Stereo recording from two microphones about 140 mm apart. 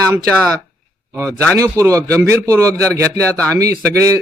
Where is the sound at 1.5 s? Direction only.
20° right (ahead or behind).